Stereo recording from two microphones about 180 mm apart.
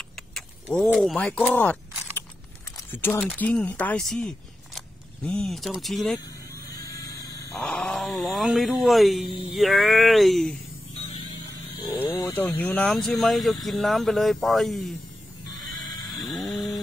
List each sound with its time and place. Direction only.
0.8 s speech: centre (ahead or behind)
2.9 s speech: 15° left (ahead or behind)
6.7 s a sound: 20° left (ahead or behind); by 9.2 s centre (ahead or behind)
9.3 s sheep: 30° left (ahead or behind)
9.6 s speech: centre (ahead or behind)
11.0 s vehicle: 30° left (ahead or behind)
12.4 s speech: 5° left (ahead or behind)
16.2 s a sound: centre (ahead or behind)